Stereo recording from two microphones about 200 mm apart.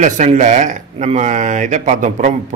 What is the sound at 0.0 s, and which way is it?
Speech, 40° right (ahead or behind).